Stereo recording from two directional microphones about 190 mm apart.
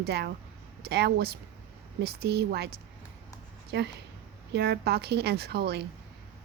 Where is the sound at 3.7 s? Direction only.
60° right (ahead or behind).